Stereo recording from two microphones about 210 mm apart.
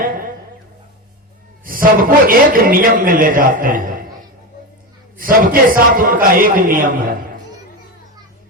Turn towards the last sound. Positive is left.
turn(degrees=-40)  # may be behind; listen again after turning